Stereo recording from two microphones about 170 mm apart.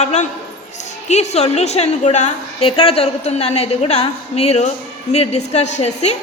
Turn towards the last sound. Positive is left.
turn(degrees=40)  # may be behind; listen again after turning